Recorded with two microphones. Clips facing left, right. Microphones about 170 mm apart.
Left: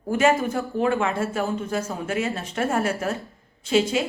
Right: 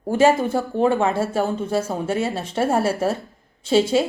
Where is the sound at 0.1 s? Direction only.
30° right (ahead or behind).